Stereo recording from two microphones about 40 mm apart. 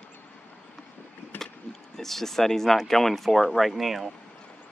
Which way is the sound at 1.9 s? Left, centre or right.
Centre.